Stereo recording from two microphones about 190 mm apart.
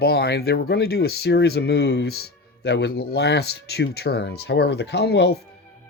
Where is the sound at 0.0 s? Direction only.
55° left (ahead or behind).